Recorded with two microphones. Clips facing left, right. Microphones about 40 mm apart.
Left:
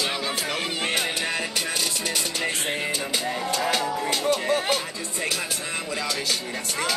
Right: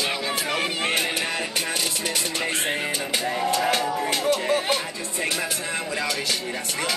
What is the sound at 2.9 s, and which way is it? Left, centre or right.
Music, right.